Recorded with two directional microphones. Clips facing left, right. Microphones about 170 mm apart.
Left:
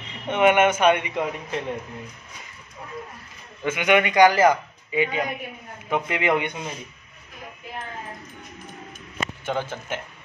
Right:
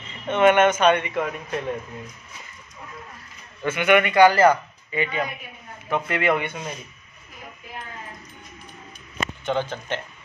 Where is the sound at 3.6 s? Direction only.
15° left (ahead or behind).